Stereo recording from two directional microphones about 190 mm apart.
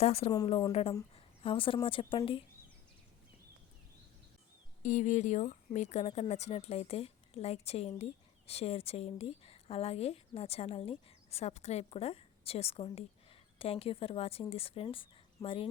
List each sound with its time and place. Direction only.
0.0 s speech: 30° left (ahead or behind)
4.8 s speech: 40° left (ahead or behind)